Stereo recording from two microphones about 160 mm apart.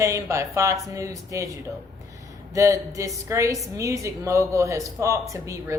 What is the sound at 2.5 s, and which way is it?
Speech, 20° right (ahead or behind).